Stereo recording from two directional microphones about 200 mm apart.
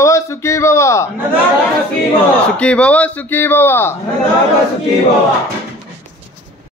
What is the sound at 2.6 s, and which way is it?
A man's voice, 5° left (ahead or behind).